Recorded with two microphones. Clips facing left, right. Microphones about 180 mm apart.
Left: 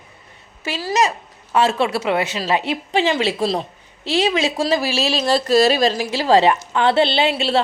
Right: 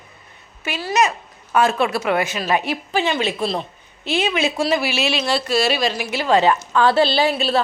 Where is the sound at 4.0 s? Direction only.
90° left.